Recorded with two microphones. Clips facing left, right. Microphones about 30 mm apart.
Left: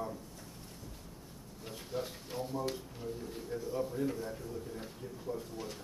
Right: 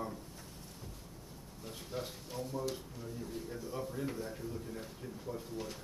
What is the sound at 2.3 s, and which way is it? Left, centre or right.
Speech, centre.